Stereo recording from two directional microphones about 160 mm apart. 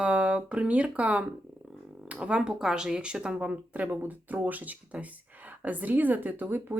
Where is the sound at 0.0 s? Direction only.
5° right (ahead or behind).